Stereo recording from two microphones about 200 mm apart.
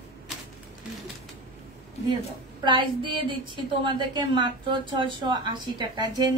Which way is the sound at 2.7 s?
25° right (ahead or behind).